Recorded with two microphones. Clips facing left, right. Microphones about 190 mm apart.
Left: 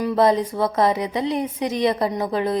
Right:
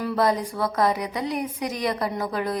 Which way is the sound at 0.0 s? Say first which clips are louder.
Left 5 dB; 25° left (ahead or behind).